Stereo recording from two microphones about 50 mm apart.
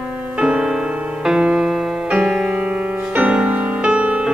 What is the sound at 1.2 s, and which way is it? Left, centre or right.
Music, centre.